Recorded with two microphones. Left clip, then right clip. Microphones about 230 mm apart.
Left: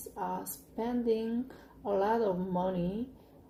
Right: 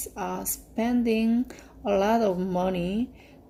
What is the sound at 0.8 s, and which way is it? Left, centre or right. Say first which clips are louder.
Speech: right 6 dB; right.